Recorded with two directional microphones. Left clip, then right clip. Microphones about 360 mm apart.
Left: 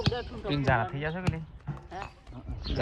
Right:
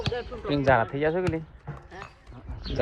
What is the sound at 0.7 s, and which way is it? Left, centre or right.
Speech, right.